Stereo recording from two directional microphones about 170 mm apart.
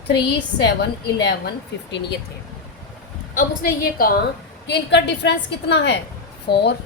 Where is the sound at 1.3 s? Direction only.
85° left.